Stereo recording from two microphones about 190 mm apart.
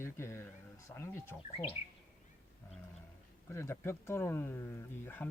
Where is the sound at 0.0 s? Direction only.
15° left (ahead or behind).